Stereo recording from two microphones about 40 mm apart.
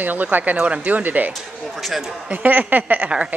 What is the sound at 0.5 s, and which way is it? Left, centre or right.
Speech, right.